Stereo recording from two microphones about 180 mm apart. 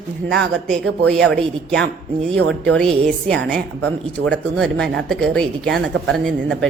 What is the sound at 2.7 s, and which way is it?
A woman's voice, 5° left (ahead or behind).